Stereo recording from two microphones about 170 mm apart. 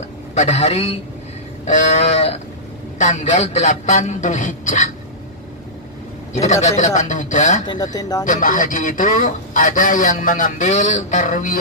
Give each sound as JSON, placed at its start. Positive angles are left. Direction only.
{"t": 0.3, "sound": "a man's voice", "side_deg": 40}
{"t": 6.8, "sound": "a man's voice", "side_deg": 45}
{"t": 7.6, "sound": "speech", "side_deg": 25}
{"t": 8.3, "sound": "a man's voice", "side_deg": 50}